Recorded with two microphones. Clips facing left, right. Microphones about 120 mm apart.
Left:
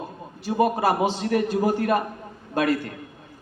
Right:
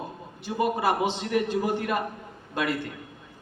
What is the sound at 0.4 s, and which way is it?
A man's voice, 35° left (ahead or behind).